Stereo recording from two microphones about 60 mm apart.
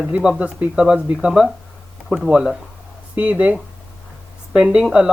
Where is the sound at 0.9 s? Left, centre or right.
Centre.